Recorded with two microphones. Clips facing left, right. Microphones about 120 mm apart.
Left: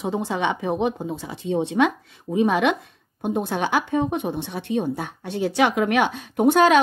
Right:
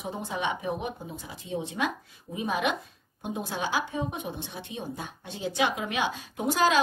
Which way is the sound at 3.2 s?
55° left (ahead or behind).